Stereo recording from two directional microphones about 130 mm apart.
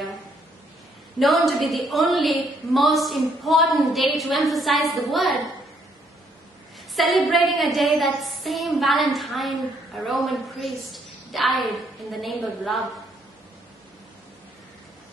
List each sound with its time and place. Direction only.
1.2 s a woman's voice: centre (ahead or behind)
7.0 s a woman's voice: centre (ahead or behind)